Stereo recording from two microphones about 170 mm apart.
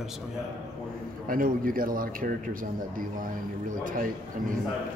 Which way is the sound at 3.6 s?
55° right (ahead or behind).